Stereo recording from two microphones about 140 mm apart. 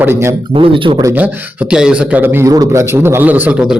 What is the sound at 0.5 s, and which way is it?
Speech, 35° right (ahead or behind).